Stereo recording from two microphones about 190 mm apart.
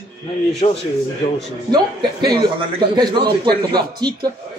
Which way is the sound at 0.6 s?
30° left (ahead or behind).